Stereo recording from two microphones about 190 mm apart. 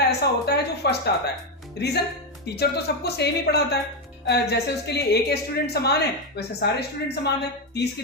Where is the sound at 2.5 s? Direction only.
60° left (ahead or behind).